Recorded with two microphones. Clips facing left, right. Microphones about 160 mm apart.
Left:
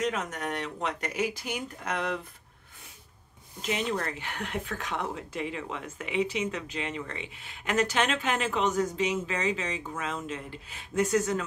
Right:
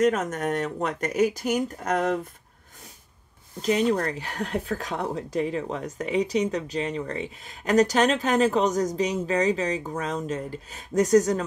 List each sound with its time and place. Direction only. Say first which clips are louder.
0.0 s speech: right 8 dB; 45° right (ahead or behind)
3.6 s speech: right 8 dB; 40° right (ahead or behind)